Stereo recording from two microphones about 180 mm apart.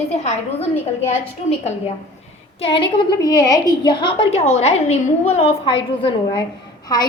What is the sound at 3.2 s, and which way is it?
A woman's voice, 20° left (ahead or behind).